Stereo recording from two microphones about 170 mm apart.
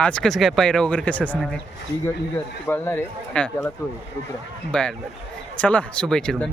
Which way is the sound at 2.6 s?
15° left (ahead or behind).